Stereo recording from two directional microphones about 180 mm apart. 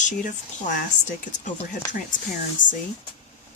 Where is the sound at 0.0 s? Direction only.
45° left (ahead or behind).